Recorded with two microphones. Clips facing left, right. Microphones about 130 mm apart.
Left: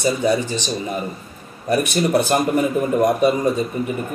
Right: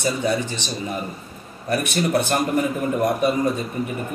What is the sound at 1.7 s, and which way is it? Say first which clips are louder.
A man's voice: left 3 dB; 15° left (ahead or behind).